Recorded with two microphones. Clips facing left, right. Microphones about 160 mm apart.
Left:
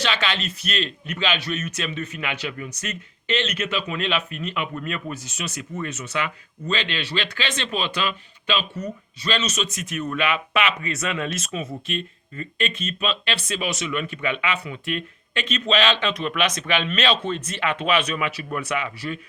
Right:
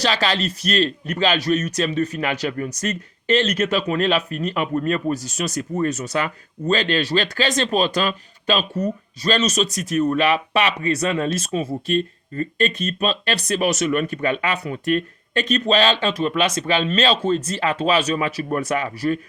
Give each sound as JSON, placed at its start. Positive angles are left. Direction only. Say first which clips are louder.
{"t": 0.0, "sound": "a man's voice", "louder": "right 5 dB", "side_deg": -35}